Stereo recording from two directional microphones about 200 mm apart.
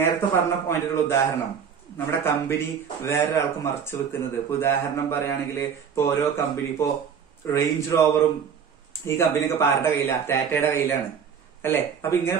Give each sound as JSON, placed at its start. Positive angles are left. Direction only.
{"t": 0.0, "sound": "a man's voice", "side_deg": 10}